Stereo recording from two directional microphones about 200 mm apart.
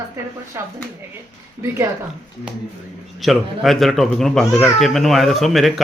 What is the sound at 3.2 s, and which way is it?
Speech, centre (ahead or behind).